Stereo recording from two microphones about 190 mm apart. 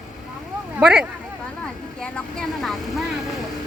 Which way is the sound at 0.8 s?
5° right (ahead or behind).